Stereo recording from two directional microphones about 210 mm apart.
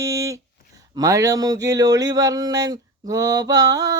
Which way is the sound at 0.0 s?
15° right (ahead or behind).